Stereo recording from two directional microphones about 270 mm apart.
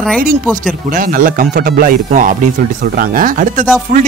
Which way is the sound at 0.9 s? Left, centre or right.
Right.